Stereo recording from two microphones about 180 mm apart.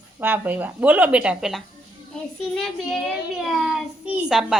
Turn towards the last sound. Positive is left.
turn(degrees=0)  # may be behind; listen again after turning